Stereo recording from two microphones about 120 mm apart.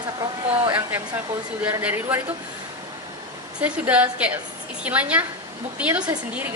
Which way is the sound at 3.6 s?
10° right (ahead or behind).